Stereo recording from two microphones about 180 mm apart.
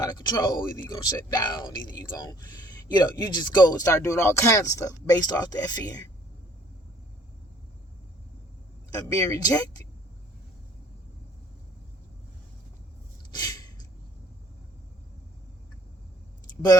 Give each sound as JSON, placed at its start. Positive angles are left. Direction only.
{"t": 0.0, "sound": "speech", "side_deg": 20}
{"t": 9.0, "sound": "speech", "side_deg": 20}
{"t": 13.3, "sound": "a sound", "side_deg": 20}